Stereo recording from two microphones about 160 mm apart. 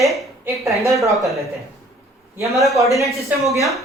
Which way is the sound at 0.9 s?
20° right (ahead or behind).